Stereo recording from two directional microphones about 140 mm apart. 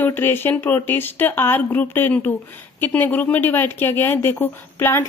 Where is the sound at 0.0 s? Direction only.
15° left (ahead or behind).